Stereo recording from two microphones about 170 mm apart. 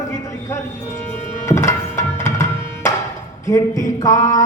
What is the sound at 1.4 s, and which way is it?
Tabla, 15° left (ahead or behind).